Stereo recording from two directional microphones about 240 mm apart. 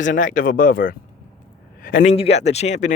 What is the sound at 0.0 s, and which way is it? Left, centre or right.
Speech, left.